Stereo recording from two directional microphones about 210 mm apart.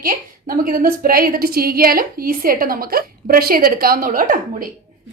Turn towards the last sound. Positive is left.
turn(degrees=-40)  # may be behind; listen again after turning